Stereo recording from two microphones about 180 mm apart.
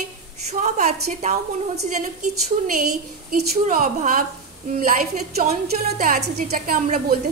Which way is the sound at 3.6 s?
40° right (ahead or behind).